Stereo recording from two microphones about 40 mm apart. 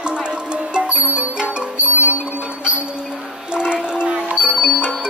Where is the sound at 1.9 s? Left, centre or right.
Right.